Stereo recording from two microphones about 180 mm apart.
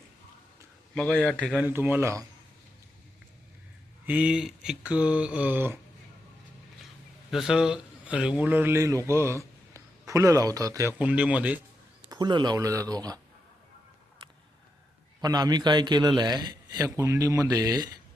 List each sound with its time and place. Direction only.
0.9 s a man's voice: 5° left (ahead or behind)
1.5 s speech: 10° right (ahead or behind)
4.0 s speech: 10° right (ahead or behind)
7.3 s a man's voice: centre (ahead or behind)
12.0 s a man's voice: 20° right (ahead or behind)
15.2 s a man's voice: 20° right (ahead or behind)